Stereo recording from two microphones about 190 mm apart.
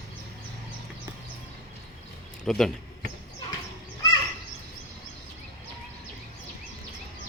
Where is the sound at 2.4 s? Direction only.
Centre (ahead or behind).